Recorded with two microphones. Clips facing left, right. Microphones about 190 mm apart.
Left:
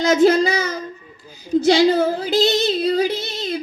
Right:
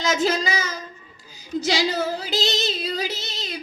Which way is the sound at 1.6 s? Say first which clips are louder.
Left 9 dB; 55° left (ahead or behind).